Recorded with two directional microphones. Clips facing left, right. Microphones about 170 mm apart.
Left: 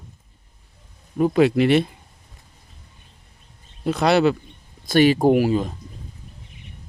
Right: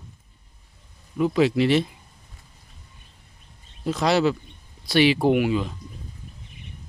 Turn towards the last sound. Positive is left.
turn(degrees=40)  # may be behind; listen again after turning